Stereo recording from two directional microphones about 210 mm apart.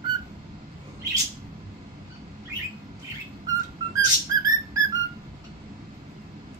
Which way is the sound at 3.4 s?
15° right (ahead or behind).